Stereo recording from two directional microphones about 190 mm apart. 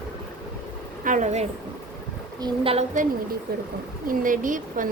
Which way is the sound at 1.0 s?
40° right (ahead or behind).